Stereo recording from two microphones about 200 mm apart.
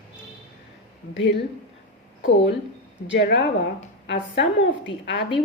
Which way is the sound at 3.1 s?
60° left (ahead or behind).